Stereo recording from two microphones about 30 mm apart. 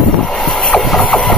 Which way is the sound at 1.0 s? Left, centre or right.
Centre.